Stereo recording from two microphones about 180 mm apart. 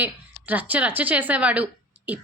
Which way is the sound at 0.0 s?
10° right (ahead or behind).